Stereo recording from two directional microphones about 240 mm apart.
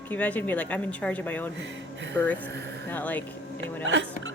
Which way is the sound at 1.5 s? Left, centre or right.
Right.